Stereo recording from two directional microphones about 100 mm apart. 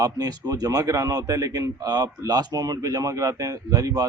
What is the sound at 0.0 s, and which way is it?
Speech, 40° right (ahead or behind).